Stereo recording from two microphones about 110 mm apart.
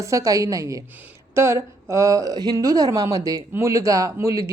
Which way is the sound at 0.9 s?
25° right (ahead or behind).